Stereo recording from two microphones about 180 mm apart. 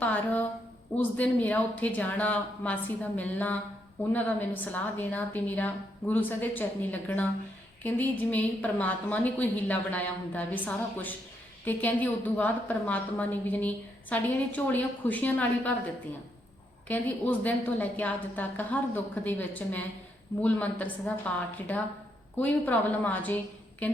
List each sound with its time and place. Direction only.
0.0 s a sound: 10° left (ahead or behind)
0.9 s a woman's voice: 10° left (ahead or behind)
16.9 s a woman's voice: 10° left (ahead or behind)